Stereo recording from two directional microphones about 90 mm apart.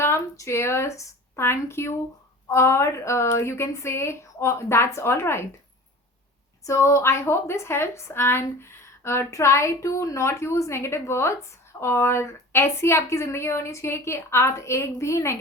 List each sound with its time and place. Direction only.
0.0 s a woman's voice: 30° left (ahead or behind)
6.7 s a woman's voice: 35° left (ahead or behind)